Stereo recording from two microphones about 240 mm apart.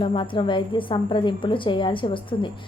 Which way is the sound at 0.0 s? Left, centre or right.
Left.